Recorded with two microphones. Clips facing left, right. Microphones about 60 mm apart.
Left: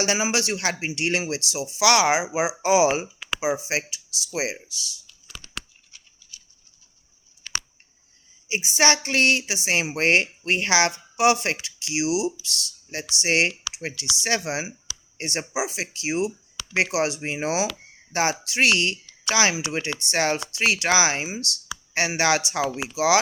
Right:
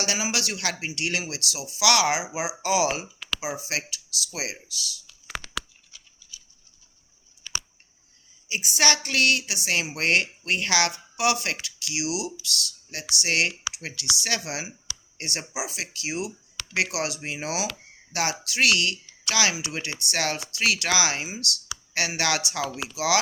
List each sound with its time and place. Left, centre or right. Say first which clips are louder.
0.0 s speech: left 5 dB; left
5.0 s clicking: right 9 dB; right
8.4 s speech: left 3 dB; left